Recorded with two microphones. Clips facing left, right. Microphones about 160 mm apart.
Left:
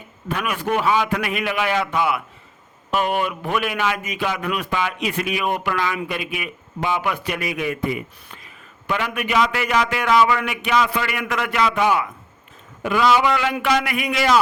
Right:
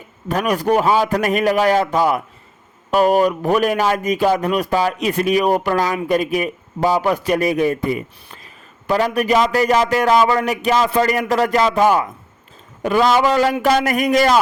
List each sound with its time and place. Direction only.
0.3 s speech: 40° right (ahead or behind)